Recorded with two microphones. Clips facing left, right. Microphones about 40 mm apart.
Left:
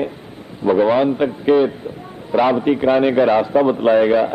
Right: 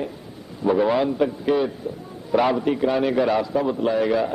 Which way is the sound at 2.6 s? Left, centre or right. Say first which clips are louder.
Left 6 dB; left.